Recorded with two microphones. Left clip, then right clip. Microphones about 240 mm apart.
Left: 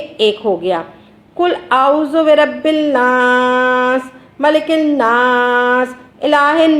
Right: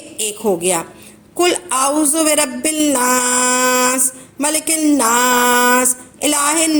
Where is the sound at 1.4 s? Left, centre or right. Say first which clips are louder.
Left 3 dB; right.